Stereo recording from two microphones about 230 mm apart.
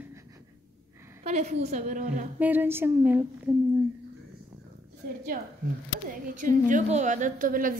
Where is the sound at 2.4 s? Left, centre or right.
Centre.